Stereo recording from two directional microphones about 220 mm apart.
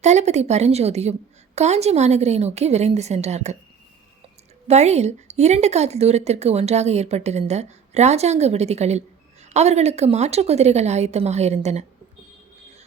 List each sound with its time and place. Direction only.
0.0 s a woman's voice: 30° right (ahead or behind)
4.7 s a woman's voice: 30° right (ahead or behind)